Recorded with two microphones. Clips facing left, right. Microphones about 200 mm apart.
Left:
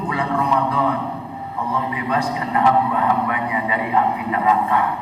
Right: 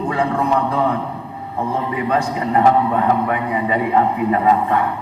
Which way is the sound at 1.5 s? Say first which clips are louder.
Right 3 dB; 45° right (ahead or behind).